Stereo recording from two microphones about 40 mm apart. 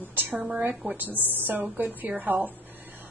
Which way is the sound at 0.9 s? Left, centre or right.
Right.